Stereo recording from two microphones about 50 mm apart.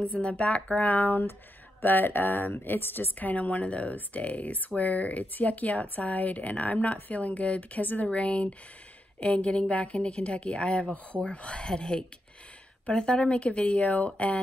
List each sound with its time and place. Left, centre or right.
0.0 s a woman's voice: left